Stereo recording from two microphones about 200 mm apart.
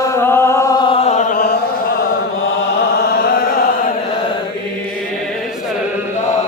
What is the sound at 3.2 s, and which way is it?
Chant, 50° left (ahead or behind).